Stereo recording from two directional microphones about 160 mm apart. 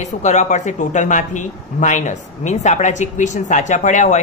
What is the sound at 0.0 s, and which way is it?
A woman's voice, 45° left (ahead or behind).